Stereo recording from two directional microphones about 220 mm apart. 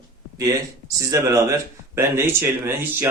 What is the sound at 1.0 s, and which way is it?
Speech, 15° right (ahead or behind).